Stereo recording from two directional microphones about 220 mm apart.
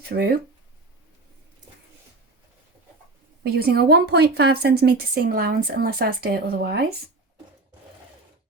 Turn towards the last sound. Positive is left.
turn(degrees=-45)  # may be behind; listen again after turning